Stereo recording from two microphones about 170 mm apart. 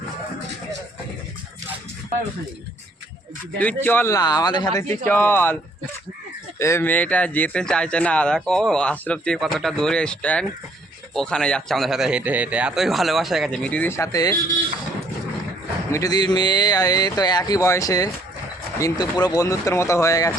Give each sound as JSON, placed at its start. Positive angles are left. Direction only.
{"t": 3.6, "sound": "speech", "side_deg": 10}
{"t": 6.6, "sound": "speech", "side_deg": 15}
{"t": 15.9, "sound": "speech", "side_deg": 20}